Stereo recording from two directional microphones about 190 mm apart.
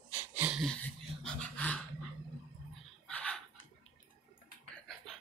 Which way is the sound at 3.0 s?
5° left (ahead or behind).